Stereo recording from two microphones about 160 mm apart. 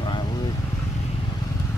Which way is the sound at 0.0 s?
30° left (ahead or behind).